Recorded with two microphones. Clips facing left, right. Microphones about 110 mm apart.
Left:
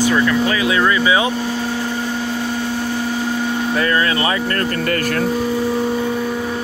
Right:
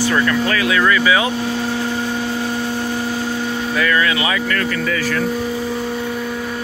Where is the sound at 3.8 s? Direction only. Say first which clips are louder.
Right 1 dB; 35° left (ahead or behind).